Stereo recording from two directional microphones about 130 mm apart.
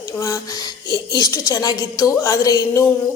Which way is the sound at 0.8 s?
35° left (ahead or behind).